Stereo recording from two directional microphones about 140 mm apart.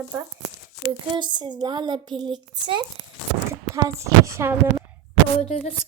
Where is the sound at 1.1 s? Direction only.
30° right (ahead or behind).